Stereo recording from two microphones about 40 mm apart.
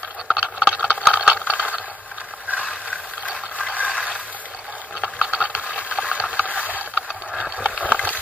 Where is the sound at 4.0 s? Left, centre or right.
Left.